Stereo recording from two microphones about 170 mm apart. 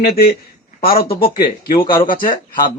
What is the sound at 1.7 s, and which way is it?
Speech, 30° left (ahead or behind).